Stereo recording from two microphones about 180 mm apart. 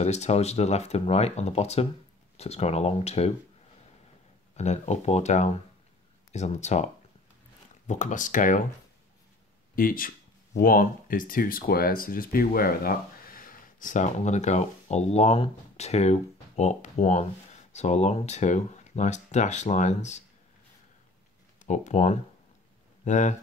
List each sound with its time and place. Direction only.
0.0 s speech: 40° left (ahead or behind)
4.6 s speech: 40° left (ahead or behind)
9.8 s speech: 50° left (ahead or behind)
21.5 s speech: 40° left (ahead or behind)